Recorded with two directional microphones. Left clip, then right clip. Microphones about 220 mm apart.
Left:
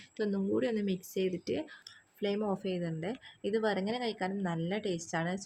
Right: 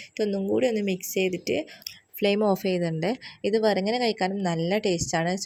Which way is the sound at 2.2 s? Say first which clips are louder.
Right 11 dB; 30° right (ahead or behind).